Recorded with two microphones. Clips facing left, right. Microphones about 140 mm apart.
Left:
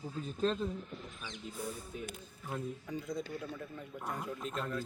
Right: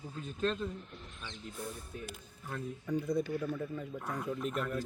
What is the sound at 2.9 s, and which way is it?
Speech, 60° right (ahead or behind).